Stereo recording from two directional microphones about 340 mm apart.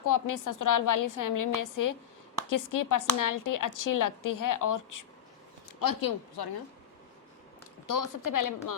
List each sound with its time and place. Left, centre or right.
0.0 s a woman's voice: left
5.8 s speech: left
7.9 s a woman's voice: left